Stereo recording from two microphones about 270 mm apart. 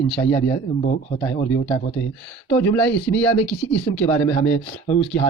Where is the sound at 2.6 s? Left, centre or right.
Centre.